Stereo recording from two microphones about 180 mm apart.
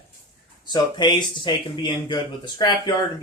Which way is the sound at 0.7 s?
25° left (ahead or behind).